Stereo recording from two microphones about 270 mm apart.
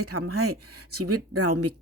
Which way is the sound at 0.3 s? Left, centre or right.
Right.